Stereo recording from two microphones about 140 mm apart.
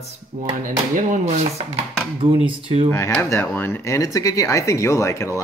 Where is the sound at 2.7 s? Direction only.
35° right (ahead or behind).